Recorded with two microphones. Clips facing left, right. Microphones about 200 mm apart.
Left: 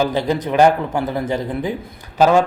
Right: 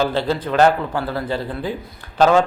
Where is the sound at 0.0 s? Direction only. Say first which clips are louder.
Left 1 dB; 15° left (ahead or behind).